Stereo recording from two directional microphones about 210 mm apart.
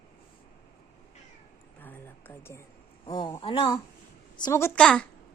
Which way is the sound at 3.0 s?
20° left (ahead or behind).